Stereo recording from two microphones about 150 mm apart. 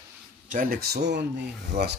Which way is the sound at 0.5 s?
75° right (ahead or behind).